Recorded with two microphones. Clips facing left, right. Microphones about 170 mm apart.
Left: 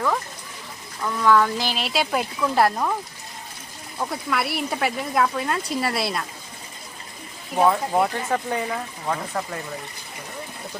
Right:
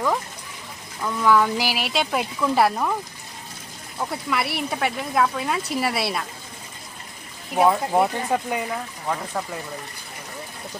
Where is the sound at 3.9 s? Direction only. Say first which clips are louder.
Even; centre (ahead or behind).